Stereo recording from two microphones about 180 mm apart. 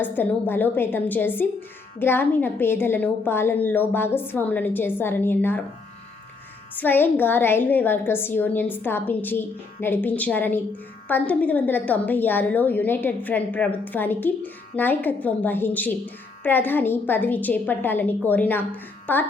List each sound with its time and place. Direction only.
0.0 s a woman's voice: 10° left (ahead or behind)
6.7 s a woman's voice: 10° left (ahead or behind)